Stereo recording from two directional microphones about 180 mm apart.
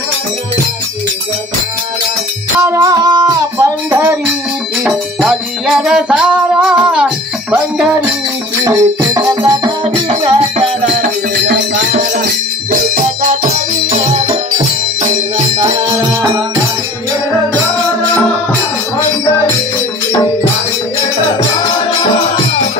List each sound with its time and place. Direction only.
2.6 s music: 20° right (ahead or behind)
4.8 s music: 5° right (ahead or behind)
8.6 s music: 20° right (ahead or behind)
10.8 s music: 45° right (ahead or behind)
11.3 s music: 70° right (ahead or behind)
12.9 s music: 45° right (ahead or behind)
13.8 s music: 30° right (ahead or behind)